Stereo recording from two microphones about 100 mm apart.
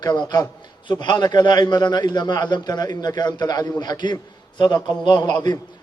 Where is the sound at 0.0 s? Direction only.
45° left (ahead or behind).